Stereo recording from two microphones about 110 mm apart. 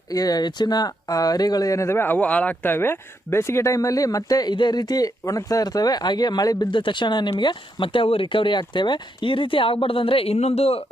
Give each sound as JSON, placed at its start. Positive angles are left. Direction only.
{"t": 0.1, "sound": "speech", "side_deg": 35}